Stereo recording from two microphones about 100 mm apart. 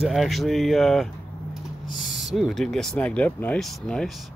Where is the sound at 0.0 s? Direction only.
Centre (ahead or behind).